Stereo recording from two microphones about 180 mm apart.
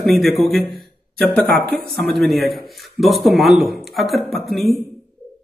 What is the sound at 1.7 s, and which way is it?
Speech, 60° right (ahead or behind).